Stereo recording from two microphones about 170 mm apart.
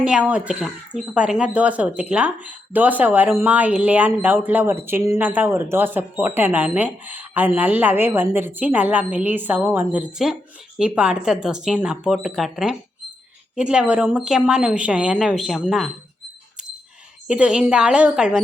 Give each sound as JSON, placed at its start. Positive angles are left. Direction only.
{"t": 0.0, "sound": "speech", "side_deg": -5}
{"t": 17.2, "sound": "speech", "side_deg": -5}